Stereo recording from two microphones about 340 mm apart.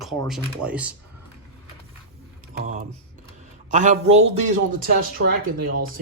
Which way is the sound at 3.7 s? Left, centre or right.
Right.